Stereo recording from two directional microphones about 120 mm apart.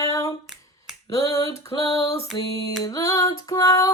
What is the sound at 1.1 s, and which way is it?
Female singing, 30° left (ahead or behind).